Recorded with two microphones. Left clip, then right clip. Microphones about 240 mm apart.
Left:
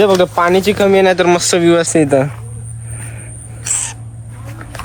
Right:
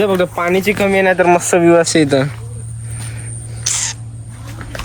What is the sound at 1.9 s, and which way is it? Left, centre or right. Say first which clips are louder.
Speech: left 1 dB; centre.